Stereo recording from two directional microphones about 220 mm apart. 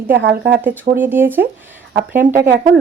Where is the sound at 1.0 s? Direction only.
10° right (ahead or behind).